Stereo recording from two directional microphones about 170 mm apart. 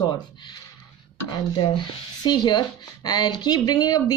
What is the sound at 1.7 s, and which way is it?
A woman's voice, 25° left (ahead or behind).